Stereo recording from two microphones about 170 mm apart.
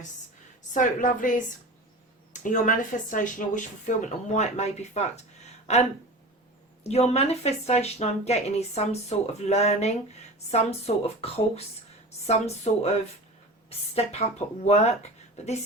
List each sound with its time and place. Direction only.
0.7 s speech: 50° left (ahead or behind)
2.3 s speech: 50° left (ahead or behind)